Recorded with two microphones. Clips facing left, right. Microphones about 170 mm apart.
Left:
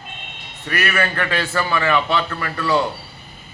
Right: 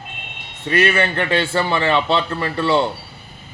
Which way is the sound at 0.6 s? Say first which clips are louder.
Right 4 dB; 25° right (ahead or behind).